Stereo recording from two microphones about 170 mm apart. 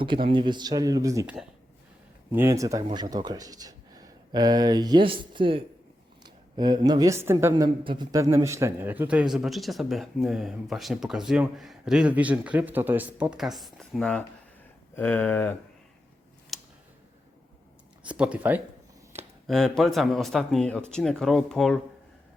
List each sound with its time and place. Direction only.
0.0 s a man's voice: 30° right (ahead or behind); by 15.5 s 10° left (ahead or behind)
16.5 s tick: centre (ahead or behind)
18.1 s speech: 5° right (ahead or behind)
19.5 s a man's voice: 5° left (ahead or behind)